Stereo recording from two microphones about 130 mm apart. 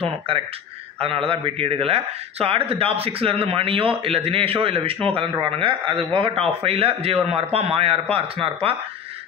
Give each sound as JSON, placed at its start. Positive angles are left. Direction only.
{"t": 1.0, "sound": "a man's voice", "side_deg": -45}